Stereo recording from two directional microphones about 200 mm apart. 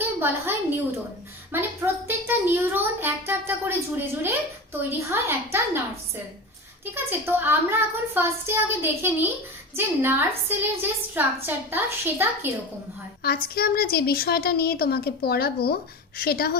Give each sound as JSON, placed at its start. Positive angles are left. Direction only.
{"t": 0.0, "sound": "a sound", "side_deg": -10}
{"t": 1.5, "sound": "a child's voice", "side_deg": -10}
{"t": 6.9, "sound": "a child's voice", "side_deg": -10}
{"t": 13.2, "sound": "a woman's voice", "side_deg": 50}